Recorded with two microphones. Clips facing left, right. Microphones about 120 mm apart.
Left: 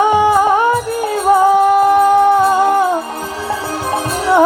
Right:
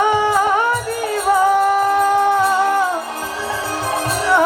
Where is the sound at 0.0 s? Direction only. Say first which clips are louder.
Left 4 dB; 15° left (ahead or behind).